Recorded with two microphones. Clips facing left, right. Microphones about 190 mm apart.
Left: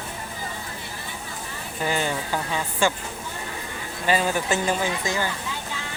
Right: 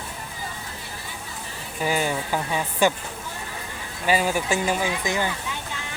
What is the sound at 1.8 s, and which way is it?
Speech, 10° right (ahead or behind).